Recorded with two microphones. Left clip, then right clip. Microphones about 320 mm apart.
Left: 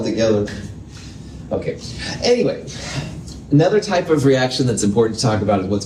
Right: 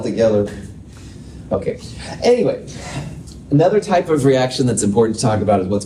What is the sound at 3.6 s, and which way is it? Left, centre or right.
Speech, right.